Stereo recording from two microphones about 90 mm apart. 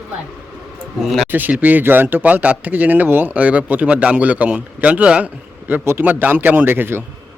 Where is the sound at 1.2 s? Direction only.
20° right (ahead or behind).